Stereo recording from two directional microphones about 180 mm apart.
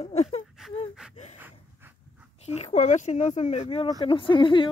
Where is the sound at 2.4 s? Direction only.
35° left (ahead or behind).